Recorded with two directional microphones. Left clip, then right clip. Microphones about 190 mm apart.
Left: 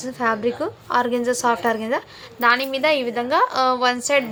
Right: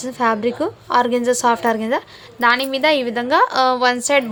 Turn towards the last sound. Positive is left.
turn(degrees=-35)  # may be behind; listen again after turning